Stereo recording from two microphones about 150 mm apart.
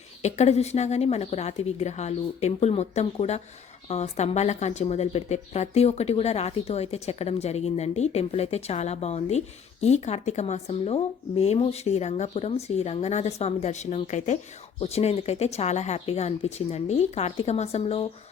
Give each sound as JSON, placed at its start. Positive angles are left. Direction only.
{"t": 0.2, "sound": "speech", "side_deg": 50}